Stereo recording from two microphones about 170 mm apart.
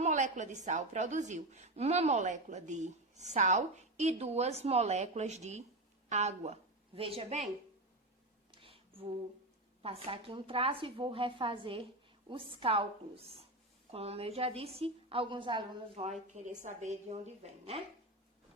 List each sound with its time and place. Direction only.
0.0 s a woman's voice: 45° right (ahead or behind)
9.8 s a woman's voice: 35° right (ahead or behind)
16.2 s a woman's voice: 45° right (ahead or behind)